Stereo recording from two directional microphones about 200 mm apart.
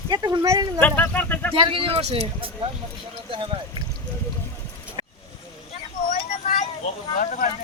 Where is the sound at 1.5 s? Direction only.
25° right (ahead or behind).